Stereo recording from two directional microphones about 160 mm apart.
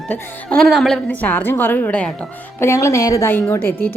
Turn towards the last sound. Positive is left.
turn(degrees=15)  # may be behind; listen again after turning